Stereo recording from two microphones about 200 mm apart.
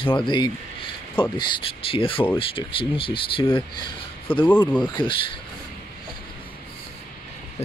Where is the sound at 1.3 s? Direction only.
25° left (ahead or behind).